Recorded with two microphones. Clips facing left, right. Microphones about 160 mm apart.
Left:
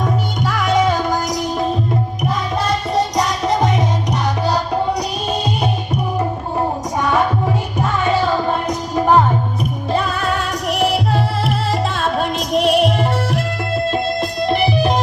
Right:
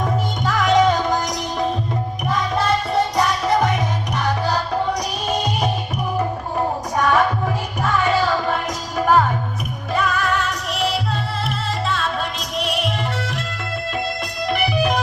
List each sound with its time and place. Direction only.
0.4 s music: 5° left (ahead or behind)
2.6 s music: 20° left (ahead or behind)
7.0 s music: 15° left (ahead or behind); by 10.3 s 35° left (ahead or behind)
10.7 s music: 55° left (ahead or behind)
13.9 s music: 30° left (ahead or behind)